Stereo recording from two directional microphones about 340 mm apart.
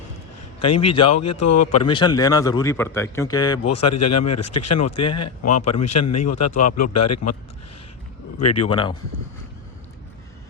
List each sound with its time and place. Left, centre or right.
0.6 s speech: centre
1.0 s a man's voice: left
2.0 s speech: centre
3.8 s a man's voice: left
8.4 s a man's voice: left
8.6 s speech: centre